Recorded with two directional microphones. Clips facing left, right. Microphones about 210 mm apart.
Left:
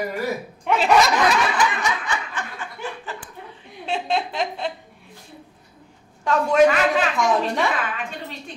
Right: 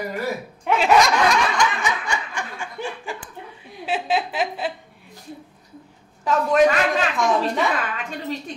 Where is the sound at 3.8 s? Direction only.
5° right (ahead or behind).